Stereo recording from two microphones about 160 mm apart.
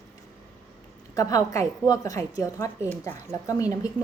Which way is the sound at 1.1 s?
20° left (ahead or behind).